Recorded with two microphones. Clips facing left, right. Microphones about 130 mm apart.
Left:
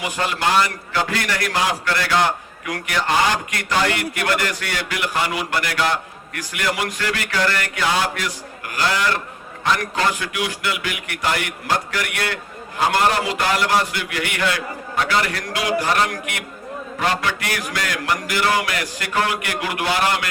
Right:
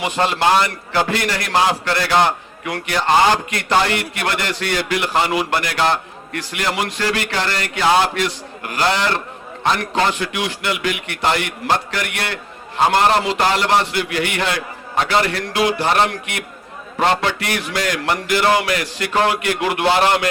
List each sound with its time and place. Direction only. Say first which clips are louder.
0.0 s a man's voice: right 5 dB; 25° right (ahead or behind)